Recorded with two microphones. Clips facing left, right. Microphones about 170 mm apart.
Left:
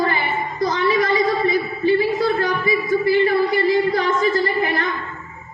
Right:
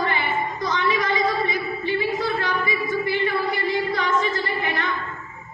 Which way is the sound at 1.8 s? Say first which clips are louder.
Left 7 dB; 40° left (ahead or behind).